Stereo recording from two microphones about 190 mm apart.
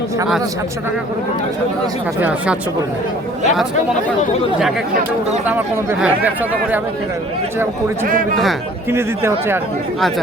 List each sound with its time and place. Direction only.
5.5 s speech: 10° right (ahead or behind)
8.0 s a man's voice: 45° right (ahead or behind)
8.9 s speech: 15° right (ahead or behind)